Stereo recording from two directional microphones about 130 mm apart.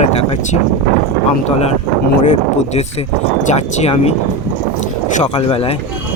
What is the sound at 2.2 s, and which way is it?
Speech, 60° left (ahead or behind).